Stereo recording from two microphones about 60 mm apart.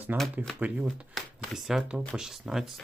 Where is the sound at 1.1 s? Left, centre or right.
Centre.